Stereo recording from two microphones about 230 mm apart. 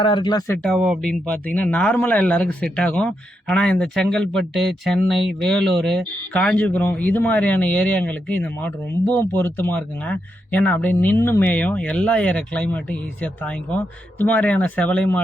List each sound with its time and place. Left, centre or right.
0.0 s speech: left
0.7 s speech: centre